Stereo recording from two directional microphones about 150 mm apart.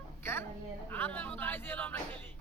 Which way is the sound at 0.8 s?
15° left (ahead or behind).